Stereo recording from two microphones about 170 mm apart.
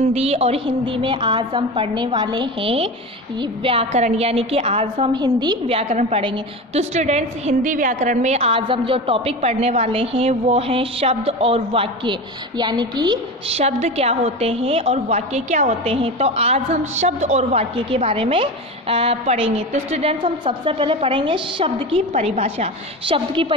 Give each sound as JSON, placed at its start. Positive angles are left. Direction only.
{"t": 0.1, "sound": "a woman's voice", "side_deg": -40}